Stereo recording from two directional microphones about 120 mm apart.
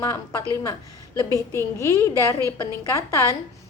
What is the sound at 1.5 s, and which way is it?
A woman's voice, 20° left (ahead or behind).